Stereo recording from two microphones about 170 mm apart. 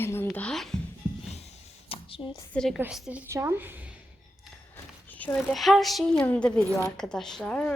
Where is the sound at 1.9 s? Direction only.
30° left (ahead or behind).